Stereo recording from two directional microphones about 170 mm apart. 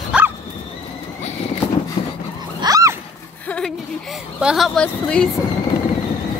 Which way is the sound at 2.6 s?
20° right (ahead or behind).